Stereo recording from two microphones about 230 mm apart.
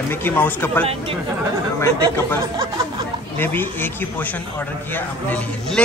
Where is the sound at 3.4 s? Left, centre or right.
Centre.